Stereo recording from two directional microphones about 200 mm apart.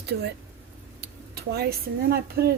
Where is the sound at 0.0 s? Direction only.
55° right (ahead or behind).